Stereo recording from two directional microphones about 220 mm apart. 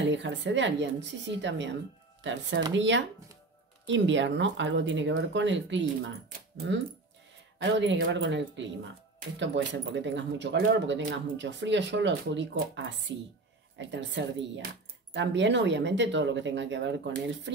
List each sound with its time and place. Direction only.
0.1 s speech: 55° right (ahead or behind)
6.2 s speech: 45° right (ahead or behind)